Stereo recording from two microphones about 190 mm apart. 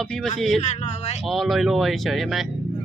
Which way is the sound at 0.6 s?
35° left (ahead or behind).